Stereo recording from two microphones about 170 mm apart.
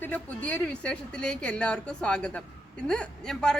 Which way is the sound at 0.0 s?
10° left (ahead or behind).